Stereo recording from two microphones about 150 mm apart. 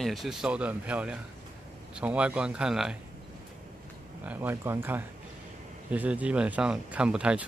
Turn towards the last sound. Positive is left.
turn(degrees=-5)  # may be behind; listen again after turning